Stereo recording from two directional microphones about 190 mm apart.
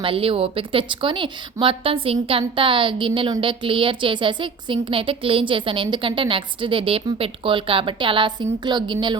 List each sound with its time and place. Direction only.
0.0 s a woman's voice: 30° right (ahead or behind)